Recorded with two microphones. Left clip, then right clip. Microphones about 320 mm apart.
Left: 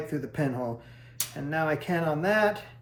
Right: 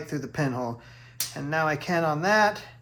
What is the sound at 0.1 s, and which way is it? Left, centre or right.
Speech, centre.